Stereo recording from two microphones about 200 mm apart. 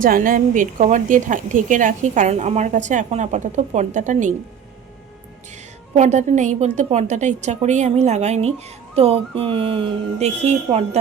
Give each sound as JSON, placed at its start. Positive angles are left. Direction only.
{"t": 0.0, "sound": "a woman's voice", "side_deg": -45}
{"t": 6.0, "sound": "a woman's voice", "side_deg": -35}
{"t": 8.5, "sound": "music", "side_deg": -30}